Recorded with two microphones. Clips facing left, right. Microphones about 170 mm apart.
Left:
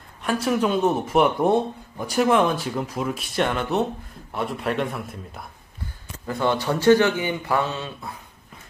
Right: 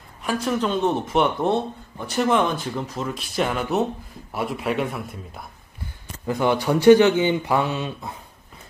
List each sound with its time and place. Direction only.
0.2 s a man's voice: centre (ahead or behind)
6.2 s speech: 15° right (ahead or behind)